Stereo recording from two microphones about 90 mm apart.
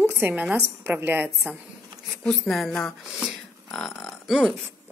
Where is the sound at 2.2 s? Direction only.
5° left (ahead or behind).